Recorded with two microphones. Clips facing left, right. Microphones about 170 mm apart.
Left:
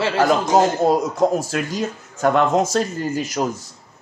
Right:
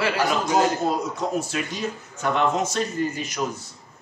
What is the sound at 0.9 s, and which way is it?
Speech, 90° left.